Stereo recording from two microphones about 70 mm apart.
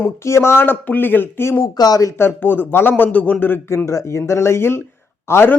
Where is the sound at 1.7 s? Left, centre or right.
Left.